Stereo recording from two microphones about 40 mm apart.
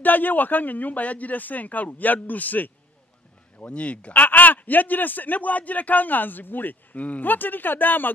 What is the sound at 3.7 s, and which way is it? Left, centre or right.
Speech, left.